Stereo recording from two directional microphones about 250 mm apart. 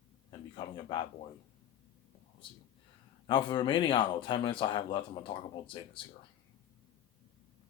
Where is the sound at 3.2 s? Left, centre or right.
Centre.